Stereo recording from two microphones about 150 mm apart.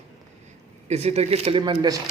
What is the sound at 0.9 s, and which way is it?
Speech, 45° right (ahead or behind).